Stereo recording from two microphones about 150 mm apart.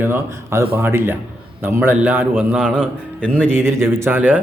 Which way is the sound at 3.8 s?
15° right (ahead or behind).